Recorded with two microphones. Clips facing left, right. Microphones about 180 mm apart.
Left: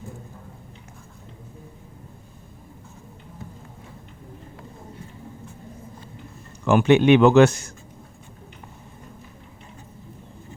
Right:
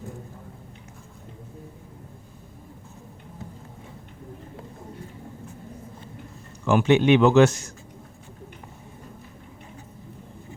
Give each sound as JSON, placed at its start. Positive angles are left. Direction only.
{"t": 6.7, "sound": "speech", "side_deg": 60}